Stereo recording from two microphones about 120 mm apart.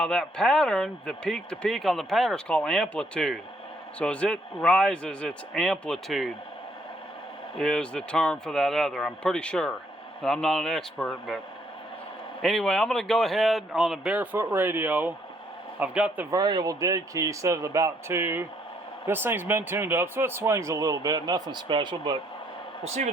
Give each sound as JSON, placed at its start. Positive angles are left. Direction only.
{"t": 0.0, "sound": "speech", "side_deg": 5}
{"t": 7.6, "sound": "speech", "side_deg": 5}
{"t": 12.4, "sound": "speech", "side_deg": 5}
{"t": 16.3, "sound": "speech", "side_deg": -35}